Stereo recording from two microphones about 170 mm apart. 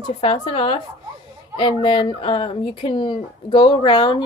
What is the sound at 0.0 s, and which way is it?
Speech, 30° left (ahead or behind).